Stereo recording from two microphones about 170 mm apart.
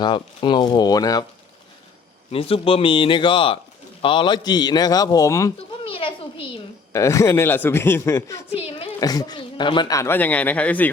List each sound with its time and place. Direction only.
0.0 s a man's voice: 25° left (ahead or behind)
2.3 s a man's voice: 35° left (ahead or behind); by 5.5 s 20° left (ahead or behind)
5.8 s a child's voice: 30° left (ahead or behind)
6.9 s speech: 15° left (ahead or behind)
8.5 s speech: 35° left (ahead or behind)
9.0 s speech: 20° left (ahead or behind)